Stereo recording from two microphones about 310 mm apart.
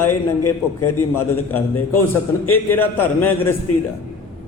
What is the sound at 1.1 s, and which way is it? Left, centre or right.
A man's voice, centre.